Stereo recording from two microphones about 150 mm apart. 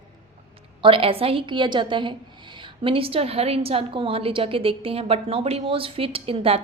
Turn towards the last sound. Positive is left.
turn(degrees=-40)  # may be behind; listen again after turning